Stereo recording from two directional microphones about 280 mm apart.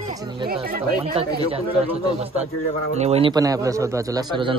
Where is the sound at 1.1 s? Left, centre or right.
Right.